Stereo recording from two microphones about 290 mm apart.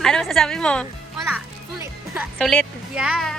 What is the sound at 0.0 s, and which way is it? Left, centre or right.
A woman's voice, centre.